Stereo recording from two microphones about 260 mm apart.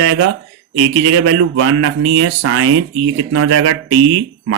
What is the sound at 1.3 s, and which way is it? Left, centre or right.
Speech, right.